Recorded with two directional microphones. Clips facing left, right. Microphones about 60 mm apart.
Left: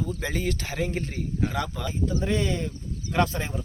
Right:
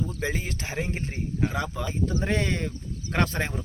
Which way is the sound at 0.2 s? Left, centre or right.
Centre.